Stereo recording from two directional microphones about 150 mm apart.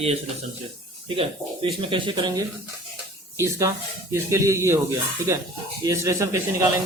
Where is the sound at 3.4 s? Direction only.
20° right (ahead or behind).